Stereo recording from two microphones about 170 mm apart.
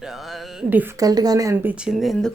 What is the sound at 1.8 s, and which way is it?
Speech, centre (ahead or behind).